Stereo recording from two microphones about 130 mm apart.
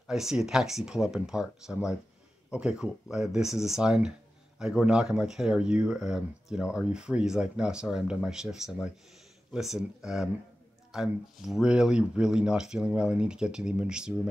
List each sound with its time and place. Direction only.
0.0 s speech: 5° right (ahead or behind)